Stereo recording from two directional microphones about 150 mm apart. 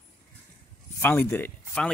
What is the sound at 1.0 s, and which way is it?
Speech, 15° left (ahead or behind).